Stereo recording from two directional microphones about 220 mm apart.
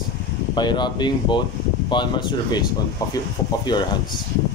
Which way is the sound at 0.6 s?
20° left (ahead or behind).